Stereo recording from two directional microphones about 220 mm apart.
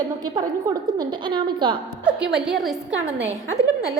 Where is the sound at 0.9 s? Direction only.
20° right (ahead or behind).